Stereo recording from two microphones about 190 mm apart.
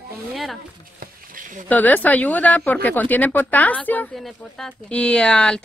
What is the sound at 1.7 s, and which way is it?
Speech, 10° left (ahead or behind).